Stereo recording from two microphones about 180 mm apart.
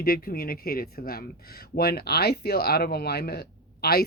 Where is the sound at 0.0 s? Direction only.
55° left (ahead or behind).